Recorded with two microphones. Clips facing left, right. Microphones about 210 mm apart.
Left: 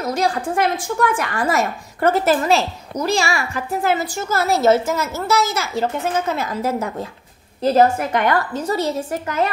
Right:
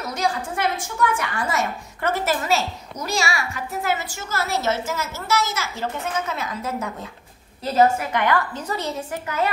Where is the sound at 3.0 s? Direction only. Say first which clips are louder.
Left 5 dB; 30° left (ahead or behind).